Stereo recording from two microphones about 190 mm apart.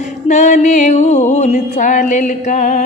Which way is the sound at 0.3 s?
40° left (ahead or behind).